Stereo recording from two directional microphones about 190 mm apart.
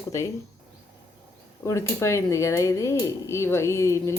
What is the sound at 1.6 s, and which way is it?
Speech, 15° left (ahead or behind).